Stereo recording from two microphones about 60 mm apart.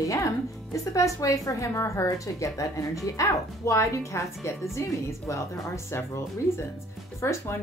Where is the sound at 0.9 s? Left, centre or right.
Left.